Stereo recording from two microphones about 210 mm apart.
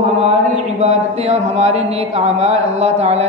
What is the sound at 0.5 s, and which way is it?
Speech, 30° right (ahead or behind).